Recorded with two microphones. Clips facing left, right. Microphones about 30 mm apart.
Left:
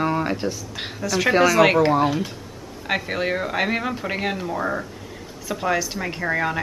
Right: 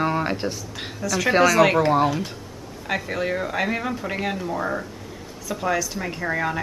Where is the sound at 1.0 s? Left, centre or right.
Centre.